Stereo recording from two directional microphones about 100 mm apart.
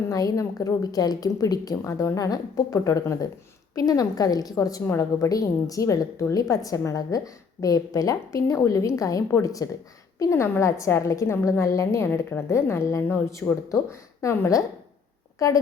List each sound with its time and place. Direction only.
0.1 s a woman's voice: 35° left (ahead or behind)